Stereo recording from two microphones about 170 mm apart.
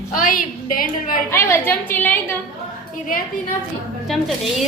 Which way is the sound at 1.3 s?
15° left (ahead or behind).